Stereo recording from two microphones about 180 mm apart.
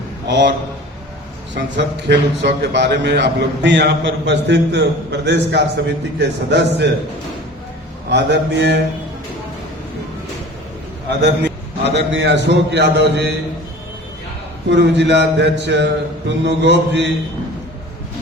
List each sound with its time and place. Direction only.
0.3 s speech: 75° right (ahead or behind)
1.5 s speech: 75° right (ahead or behind)
8.1 s speech: 75° right (ahead or behind)
11.2 s speech: 75° right (ahead or behind)
14.7 s speech: 75° right (ahead or behind)